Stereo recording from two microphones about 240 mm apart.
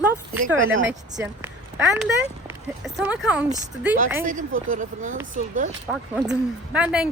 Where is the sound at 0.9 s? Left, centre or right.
Centre.